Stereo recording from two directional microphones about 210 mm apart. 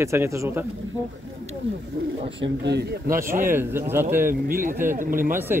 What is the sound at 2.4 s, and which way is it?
Speech, 55° right (ahead or behind).